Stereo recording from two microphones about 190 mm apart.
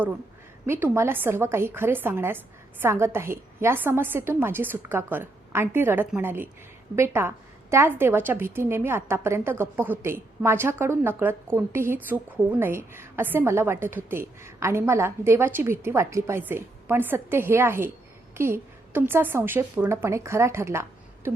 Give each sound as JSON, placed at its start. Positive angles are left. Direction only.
{"t": 0.6, "sound": "a woman's voice", "side_deg": -10}